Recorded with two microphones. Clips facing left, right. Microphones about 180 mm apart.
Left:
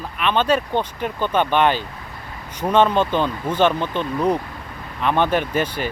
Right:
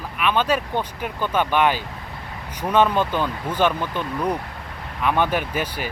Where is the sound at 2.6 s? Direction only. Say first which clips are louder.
Left 2 dB; 20° left (ahead or behind).